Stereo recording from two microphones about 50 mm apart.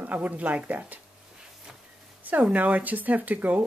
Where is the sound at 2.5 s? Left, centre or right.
Right.